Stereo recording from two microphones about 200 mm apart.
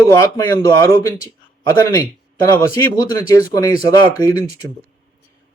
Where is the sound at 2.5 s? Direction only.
15° left (ahead or behind).